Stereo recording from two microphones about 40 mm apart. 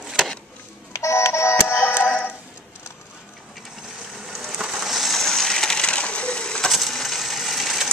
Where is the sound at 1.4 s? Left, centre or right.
Left.